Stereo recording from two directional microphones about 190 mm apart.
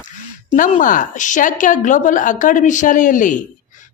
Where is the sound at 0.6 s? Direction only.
45° left (ahead or behind).